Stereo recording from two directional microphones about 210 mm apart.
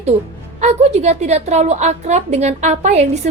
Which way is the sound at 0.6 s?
30° right (ahead or behind).